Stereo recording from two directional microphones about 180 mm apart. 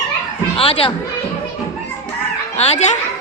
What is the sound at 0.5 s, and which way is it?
Speech, 30° left (ahead or behind).